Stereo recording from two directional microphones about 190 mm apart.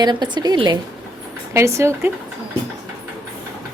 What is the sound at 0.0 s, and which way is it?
Speech, 20° right (ahead or behind).